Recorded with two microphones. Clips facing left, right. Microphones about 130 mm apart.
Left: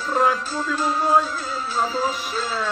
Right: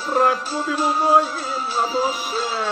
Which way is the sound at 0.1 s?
10° right (ahead or behind).